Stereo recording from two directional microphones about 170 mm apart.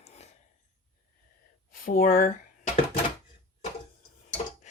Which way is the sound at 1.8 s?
55° left (ahead or behind).